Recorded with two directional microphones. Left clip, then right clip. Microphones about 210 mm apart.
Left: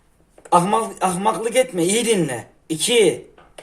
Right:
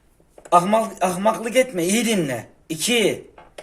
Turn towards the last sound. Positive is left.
turn(degrees=20)  # may be behind; listen again after turning